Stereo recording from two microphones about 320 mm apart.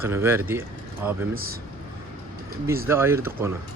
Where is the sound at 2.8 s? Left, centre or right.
Centre.